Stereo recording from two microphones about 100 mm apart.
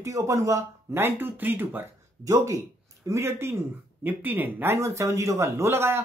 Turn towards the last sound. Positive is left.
turn(degrees=-25)  # may be behind; listen again after turning